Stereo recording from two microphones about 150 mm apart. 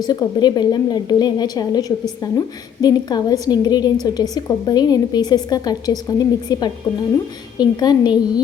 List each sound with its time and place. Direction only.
0.0 s a woman's voice: 30° left (ahead or behind)